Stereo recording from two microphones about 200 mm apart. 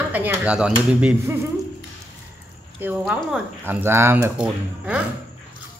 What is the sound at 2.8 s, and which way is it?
A woman's voice, 5° right (ahead or behind).